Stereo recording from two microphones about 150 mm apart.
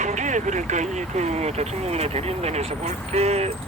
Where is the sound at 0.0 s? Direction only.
55° right (ahead or behind).